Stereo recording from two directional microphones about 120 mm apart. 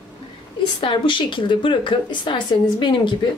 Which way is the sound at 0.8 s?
45° left (ahead or behind).